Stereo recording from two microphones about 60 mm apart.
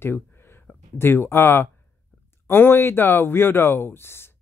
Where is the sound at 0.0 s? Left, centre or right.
Left.